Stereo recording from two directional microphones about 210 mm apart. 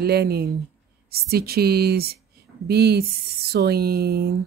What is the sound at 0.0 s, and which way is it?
Speech, 50° right (ahead or behind).